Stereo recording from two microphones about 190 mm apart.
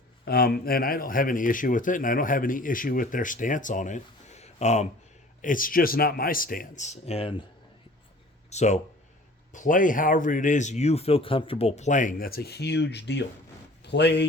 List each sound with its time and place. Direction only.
0.3 s speech: 55° left (ahead or behind); by 7.4 s 30° left (ahead or behind)
8.4 s speech: 35° left (ahead or behind); by 14.3 s 65° left (ahead or behind)